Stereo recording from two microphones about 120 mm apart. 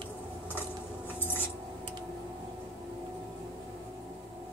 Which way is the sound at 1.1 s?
15° left (ahead or behind).